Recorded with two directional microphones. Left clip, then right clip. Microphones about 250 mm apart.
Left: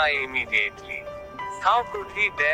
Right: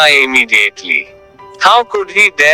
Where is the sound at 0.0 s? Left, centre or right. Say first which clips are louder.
Right 15 dB; right.